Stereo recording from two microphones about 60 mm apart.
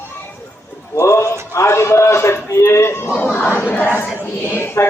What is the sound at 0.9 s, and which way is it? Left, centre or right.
A man's voice, left.